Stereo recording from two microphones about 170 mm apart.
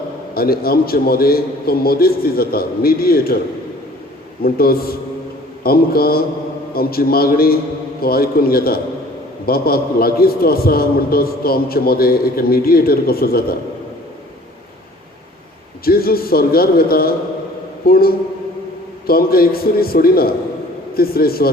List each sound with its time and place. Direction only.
0.3 s a man's voice: 65° left (ahead or behind)
4.4 s a man's voice: 65° left (ahead or behind)
15.8 s a man's voice: 60° left (ahead or behind)